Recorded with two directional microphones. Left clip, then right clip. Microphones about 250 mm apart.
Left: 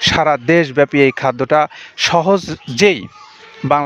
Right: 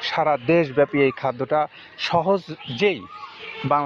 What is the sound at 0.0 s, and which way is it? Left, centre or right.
Speech, left.